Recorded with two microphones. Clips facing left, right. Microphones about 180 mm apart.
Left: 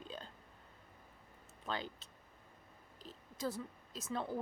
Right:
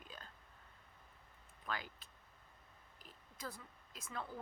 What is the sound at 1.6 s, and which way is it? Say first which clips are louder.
Speech: left 4 dB; 25° left (ahead or behind).